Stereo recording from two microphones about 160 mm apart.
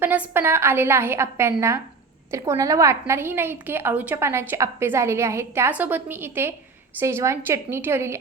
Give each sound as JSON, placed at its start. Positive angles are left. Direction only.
{"t": 0.0, "sound": "a woman's voice", "side_deg": -10}